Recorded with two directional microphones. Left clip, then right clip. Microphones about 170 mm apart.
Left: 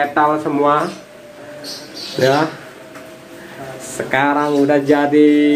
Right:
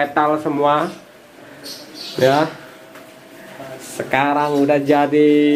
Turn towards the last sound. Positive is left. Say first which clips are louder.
# left 1 dB
turn(degrees=-20)  # may be behind; listen again after turning